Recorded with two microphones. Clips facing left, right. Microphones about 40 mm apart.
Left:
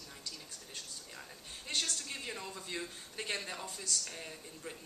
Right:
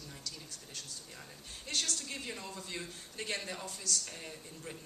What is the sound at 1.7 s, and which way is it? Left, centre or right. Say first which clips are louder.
Speech: even; left.